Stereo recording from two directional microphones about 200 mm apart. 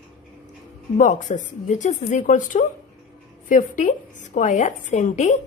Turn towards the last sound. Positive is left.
turn(degrees=35)  # may be behind; listen again after turning